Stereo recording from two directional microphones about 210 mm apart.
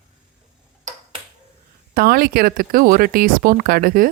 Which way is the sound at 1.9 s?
45° right (ahead or behind).